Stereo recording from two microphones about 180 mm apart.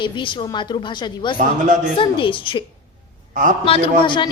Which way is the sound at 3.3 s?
45° right (ahead or behind).